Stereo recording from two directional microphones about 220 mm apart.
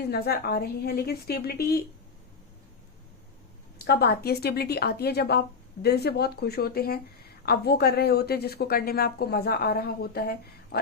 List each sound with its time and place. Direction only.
0.1 s a woman's voice: 45° left (ahead or behind)
3.8 s a woman's voice: 45° left (ahead or behind)